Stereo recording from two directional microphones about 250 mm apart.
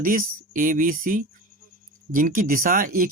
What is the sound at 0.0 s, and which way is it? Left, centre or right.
Speech, right.